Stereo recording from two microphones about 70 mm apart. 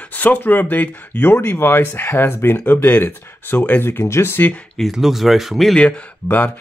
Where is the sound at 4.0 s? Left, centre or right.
Left.